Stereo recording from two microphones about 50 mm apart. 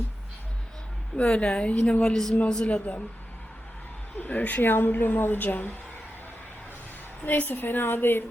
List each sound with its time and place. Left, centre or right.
1.1 s a woman's voice: left
2.0 s speech: centre
2.6 s a woman's voice: left
4.2 s a woman's voice: left
4.7 s a woman's voice: left
7.3 s a woman's voice: left